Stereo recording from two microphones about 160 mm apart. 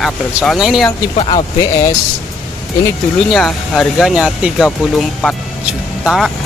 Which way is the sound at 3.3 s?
5° left (ahead or behind).